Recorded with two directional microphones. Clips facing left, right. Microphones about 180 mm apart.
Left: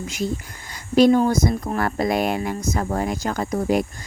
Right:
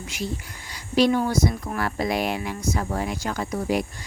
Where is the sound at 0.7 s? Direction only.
50° left (ahead or behind).